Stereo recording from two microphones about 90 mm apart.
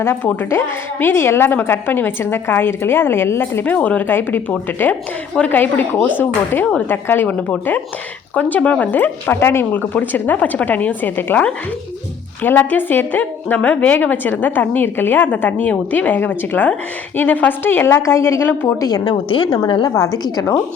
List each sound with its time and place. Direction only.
0.3 s a woman's voice: 25° left (ahead or behind)
7.3 s a woman's voice: 10° left (ahead or behind)
18.8 s a woman's voice: 40° left (ahead or behind)
19.0 s a woman's voice: 60° left (ahead or behind)